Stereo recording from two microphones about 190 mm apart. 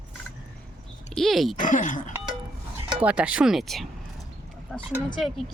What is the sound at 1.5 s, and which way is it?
Speech, 45° left (ahead or behind).